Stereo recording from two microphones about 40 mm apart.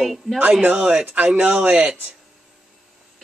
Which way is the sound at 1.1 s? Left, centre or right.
Right.